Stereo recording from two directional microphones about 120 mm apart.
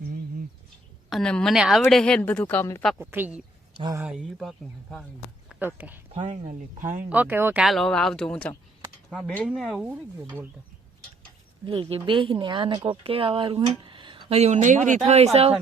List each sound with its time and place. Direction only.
1.1 s a woman's voice: 5° left (ahead or behind)
3.0 s speech: 15° right (ahead or behind)
4.2 s speech: centre (ahead or behind)
5.5 s speech: 15° right (ahead or behind)
6.4 s speech: 90° right
7.1 s speech: 15° right (ahead or behind)
7.6 s speech: centre (ahead or behind)
11.6 s speech: 45° right (ahead or behind)
13.8 s a sound: 45° right (ahead or behind)
14.3 s speech: 75° right (ahead or behind); by 15.5 s 60° right (ahead or behind)